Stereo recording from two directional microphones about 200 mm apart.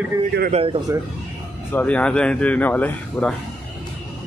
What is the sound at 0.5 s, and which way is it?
Speech, 30° right (ahead or behind).